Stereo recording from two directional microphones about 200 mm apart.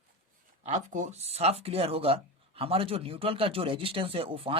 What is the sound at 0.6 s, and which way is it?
Speech, 35° right (ahead or behind).